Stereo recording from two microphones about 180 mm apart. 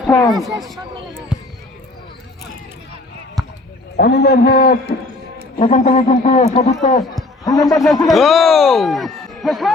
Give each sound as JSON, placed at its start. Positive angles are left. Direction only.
{"t": 0.1, "sound": "speech", "side_deg": 20}
{"t": 0.3, "sound": "speech", "side_deg": 0}
{"t": 3.9, "sound": "a man's voice", "side_deg": 70}
{"t": 5.5, "sound": "a man's voice", "side_deg": 40}
{"t": 7.4, "sound": "speech", "side_deg": 20}
{"t": 7.8, "sound": "speech", "side_deg": 0}